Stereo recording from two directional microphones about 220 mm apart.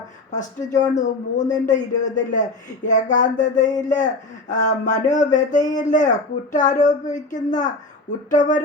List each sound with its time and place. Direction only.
0.3 s speech: 35° left (ahead or behind)